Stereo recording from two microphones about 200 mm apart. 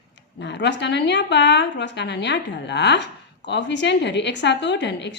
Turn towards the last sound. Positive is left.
turn(degrees=60)  # may be behind; listen again after turning